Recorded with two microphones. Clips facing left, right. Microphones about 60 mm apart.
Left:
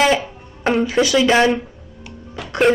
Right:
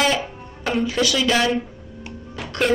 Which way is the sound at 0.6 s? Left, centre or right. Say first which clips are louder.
Left 5 dB; left.